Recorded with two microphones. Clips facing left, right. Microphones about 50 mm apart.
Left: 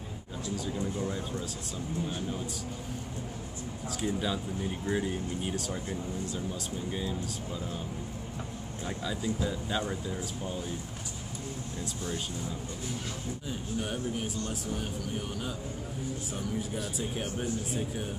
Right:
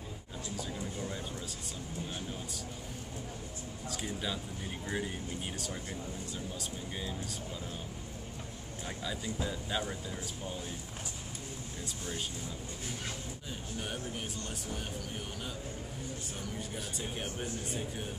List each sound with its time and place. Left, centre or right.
0.6 s a sound: centre
3.9 s speech: centre
8.8 s speech: centre
13.7 s speech: centre
16.5 s speech: centre